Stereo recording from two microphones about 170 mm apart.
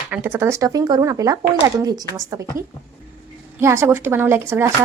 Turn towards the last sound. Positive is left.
turn(degrees=-15)  # may be behind; listen again after turning